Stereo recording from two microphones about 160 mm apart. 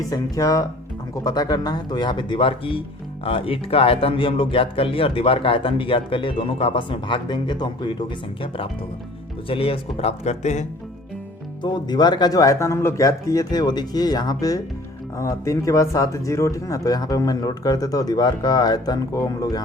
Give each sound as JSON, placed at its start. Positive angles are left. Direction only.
{"t": 0.0, "sound": "speech", "side_deg": 20}
{"t": 11.6, "sound": "speech", "side_deg": 25}